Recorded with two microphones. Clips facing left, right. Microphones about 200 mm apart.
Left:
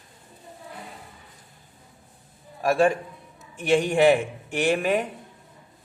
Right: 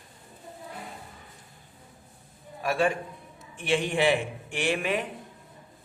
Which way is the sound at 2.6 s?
40° left (ahead or behind).